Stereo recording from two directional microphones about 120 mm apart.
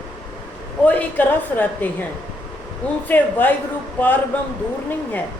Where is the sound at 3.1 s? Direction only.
15° left (ahead or behind).